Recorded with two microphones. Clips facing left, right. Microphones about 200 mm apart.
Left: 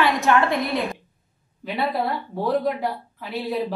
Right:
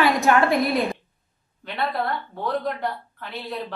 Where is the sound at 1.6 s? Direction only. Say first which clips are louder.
Left 2 dB; centre (ahead or behind).